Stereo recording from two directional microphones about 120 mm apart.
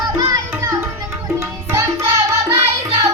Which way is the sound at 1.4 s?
20° right (ahead or behind).